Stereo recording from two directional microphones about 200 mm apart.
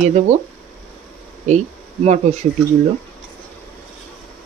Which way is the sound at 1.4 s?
35° right (ahead or behind).